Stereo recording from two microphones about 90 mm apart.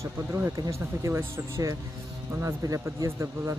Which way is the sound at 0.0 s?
25° right (ahead or behind).